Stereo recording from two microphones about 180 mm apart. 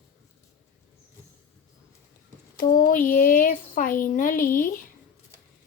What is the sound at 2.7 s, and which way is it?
Speech, 50° left (ahead or behind).